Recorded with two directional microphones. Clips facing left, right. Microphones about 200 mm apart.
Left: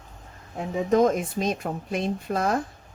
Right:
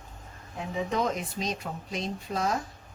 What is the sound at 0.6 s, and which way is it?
Speech, 45° left (ahead or behind).